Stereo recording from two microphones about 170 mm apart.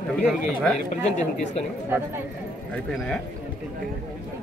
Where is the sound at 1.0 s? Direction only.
40° left (ahead or behind).